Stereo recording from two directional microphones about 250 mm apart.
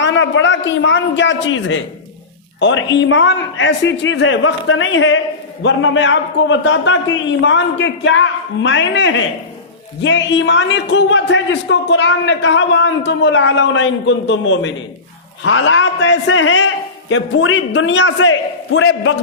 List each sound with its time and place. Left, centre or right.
0.0 s a man's voice: left